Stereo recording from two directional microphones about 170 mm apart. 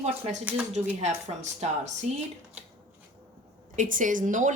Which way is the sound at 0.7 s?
40° right (ahead or behind).